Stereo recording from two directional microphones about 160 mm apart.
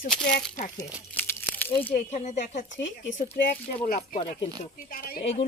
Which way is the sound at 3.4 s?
70° left (ahead or behind).